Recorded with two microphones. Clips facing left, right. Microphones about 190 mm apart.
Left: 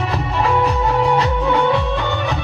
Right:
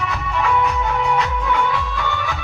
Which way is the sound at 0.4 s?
35° left (ahead or behind).